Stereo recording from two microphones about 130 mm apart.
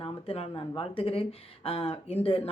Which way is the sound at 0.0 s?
45° left (ahead or behind).